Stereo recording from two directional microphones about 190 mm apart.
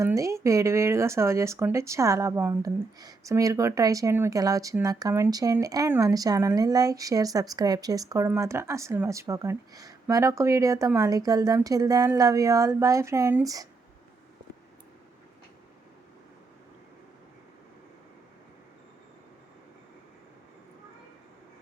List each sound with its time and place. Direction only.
0.0 s speech: 15° right (ahead or behind)